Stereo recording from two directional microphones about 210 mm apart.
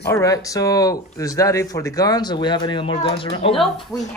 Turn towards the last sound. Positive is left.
turn(degrees=0)  # may be behind; listen again after turning